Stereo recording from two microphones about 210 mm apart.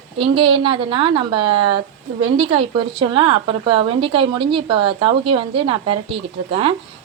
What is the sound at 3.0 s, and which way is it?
A woman's voice, 20° right (ahead or behind).